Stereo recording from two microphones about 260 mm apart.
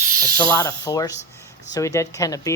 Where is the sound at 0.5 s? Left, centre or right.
Centre.